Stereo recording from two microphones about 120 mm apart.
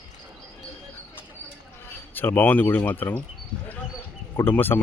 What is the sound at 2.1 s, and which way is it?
Speech, 15° left (ahead or behind).